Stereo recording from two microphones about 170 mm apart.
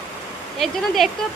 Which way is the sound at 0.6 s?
Centre (ahead or behind).